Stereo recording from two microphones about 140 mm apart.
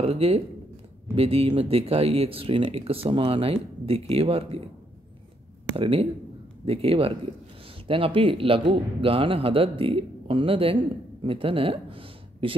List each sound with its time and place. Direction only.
0.0 s speech: 45° right (ahead or behind)
5.8 s speech: 40° right (ahead or behind)